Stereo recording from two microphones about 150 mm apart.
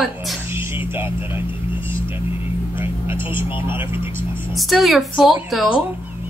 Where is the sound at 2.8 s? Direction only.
15° right (ahead or behind).